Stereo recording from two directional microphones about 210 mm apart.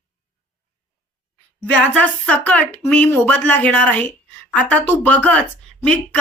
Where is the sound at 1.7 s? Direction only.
5° left (ahead or behind).